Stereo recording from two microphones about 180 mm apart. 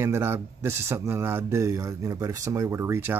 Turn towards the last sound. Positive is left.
turn(degrees=-15)  # may be behind; listen again after turning